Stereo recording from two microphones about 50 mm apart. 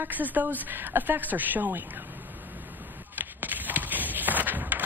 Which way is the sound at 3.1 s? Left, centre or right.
Right.